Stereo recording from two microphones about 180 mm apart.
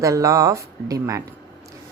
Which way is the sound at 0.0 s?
15° right (ahead or behind).